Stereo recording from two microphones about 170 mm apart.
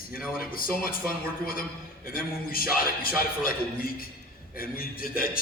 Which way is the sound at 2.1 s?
60° left (ahead or behind).